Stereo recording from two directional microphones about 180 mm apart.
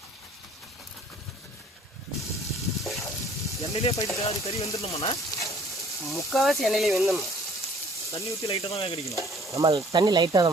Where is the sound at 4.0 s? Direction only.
15° left (ahead or behind).